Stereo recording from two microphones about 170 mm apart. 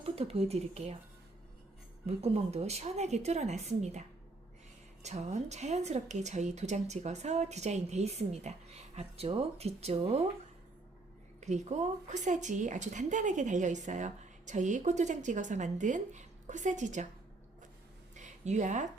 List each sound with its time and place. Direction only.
0.0 s speech: 35° right (ahead or behind)
2.0 s a woman's voice: 35° right (ahead or behind)
5.0 s a woman's voice: 40° right (ahead or behind)
11.3 s a woman's voice: 45° right (ahead or behind)
18.1 s a sound: 45° right (ahead or behind)